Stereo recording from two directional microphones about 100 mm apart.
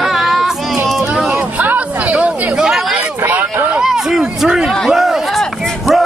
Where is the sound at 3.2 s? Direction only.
15° right (ahead or behind).